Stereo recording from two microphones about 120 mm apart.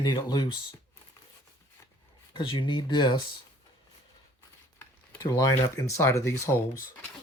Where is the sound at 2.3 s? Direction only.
40° left (ahead or behind).